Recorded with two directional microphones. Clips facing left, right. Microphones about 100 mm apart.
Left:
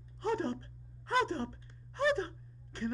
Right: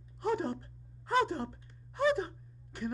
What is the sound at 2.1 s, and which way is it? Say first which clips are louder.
Gasp: right 1 dB; 10° right (ahead or behind).